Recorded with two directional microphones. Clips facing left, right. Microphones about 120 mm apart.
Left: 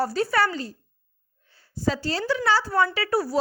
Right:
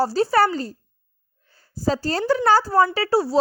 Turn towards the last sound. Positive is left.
turn(degrees=-30)  # may be behind; listen again after turning